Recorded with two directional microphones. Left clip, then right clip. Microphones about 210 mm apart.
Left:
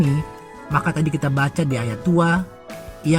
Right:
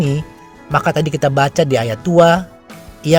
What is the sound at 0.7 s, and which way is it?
Speech, 40° right (ahead or behind).